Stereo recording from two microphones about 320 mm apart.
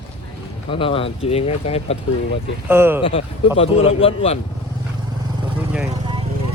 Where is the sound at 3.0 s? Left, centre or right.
Centre.